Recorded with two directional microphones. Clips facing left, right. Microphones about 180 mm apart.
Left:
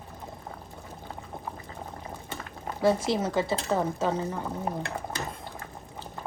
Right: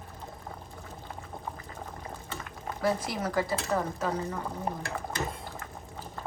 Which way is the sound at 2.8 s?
25° left (ahead or behind).